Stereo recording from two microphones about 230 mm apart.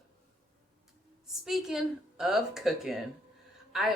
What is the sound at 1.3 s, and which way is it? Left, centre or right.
Speech, centre.